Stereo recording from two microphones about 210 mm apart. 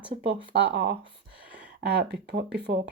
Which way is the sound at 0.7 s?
60° right (ahead or behind).